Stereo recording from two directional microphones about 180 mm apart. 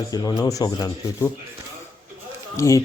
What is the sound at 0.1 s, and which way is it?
Speech, 20° left (ahead or behind).